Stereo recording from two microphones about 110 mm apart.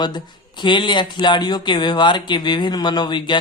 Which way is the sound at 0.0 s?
45° left (ahead or behind).